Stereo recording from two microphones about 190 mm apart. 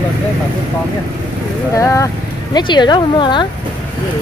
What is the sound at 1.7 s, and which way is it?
Speech, 15° left (ahead or behind).